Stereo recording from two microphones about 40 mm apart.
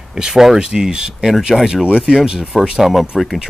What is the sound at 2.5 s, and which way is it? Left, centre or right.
Speech, centre.